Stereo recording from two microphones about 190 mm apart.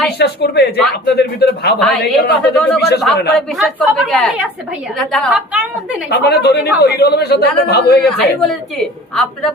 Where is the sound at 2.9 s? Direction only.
60° left (ahead or behind).